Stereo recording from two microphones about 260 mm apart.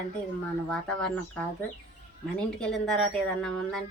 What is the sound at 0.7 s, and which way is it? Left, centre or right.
A woman's voice, centre.